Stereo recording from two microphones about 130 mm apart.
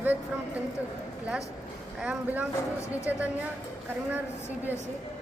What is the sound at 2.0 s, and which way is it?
Speech, 10° right (ahead or behind).